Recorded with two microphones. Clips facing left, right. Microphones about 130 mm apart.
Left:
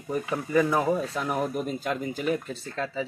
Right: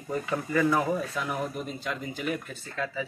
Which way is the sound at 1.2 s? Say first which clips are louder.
Left 4 dB; 50° left (ahead or behind).